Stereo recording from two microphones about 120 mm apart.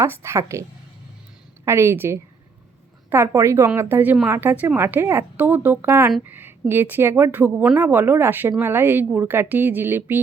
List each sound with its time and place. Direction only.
0.0 s a woman's voice: 25° right (ahead or behind)
1.6 s a woman's voice: 20° right (ahead or behind)